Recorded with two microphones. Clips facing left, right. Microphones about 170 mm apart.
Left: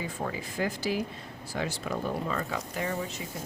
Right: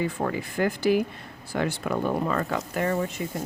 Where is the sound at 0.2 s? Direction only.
60° right (ahead or behind).